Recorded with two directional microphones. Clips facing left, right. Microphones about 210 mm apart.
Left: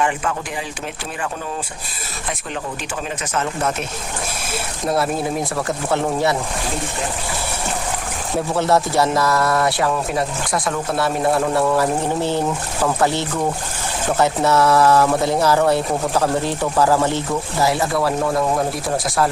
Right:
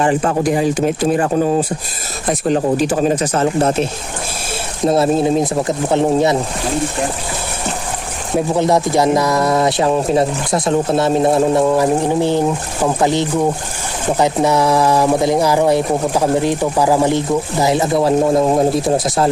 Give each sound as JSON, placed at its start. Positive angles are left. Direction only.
{"t": 0.0, "sound": "speech", "side_deg": -35}
{"t": 4.9, "sound": "speech", "side_deg": -25}
{"t": 8.4, "sound": "speech", "side_deg": -15}